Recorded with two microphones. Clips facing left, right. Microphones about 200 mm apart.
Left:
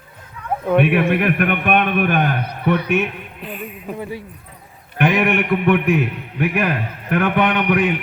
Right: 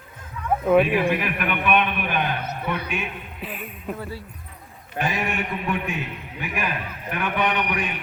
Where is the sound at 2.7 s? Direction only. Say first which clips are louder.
Left 12 dB; 65° left (ahead or behind).